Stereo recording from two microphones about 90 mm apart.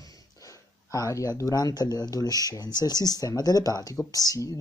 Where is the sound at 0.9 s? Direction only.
35° left (ahead or behind).